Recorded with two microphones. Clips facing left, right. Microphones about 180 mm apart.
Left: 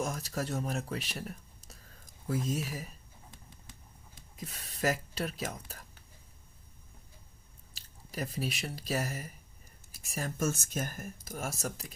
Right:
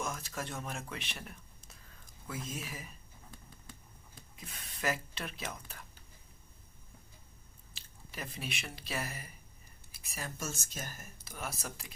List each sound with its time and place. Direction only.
0.0 s speech: 40° left (ahead or behind)
4.4 s speech: 40° left (ahead or behind)
7.7 s speech: 40° left (ahead or behind)
10.5 s speech: 55° left (ahead or behind)